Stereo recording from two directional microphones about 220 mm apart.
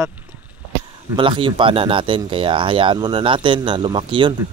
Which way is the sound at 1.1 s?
25° right (ahead or behind).